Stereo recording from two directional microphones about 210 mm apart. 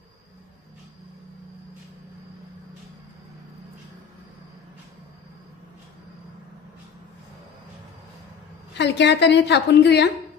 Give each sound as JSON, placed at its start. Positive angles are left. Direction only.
{"t": 8.7, "sound": "a woman's voice", "side_deg": 55}